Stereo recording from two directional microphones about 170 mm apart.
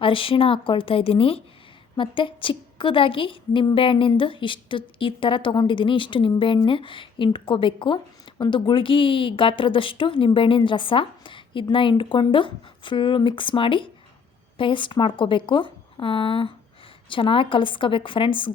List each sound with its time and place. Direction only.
0.0 s a woman's voice: 30° left (ahead or behind)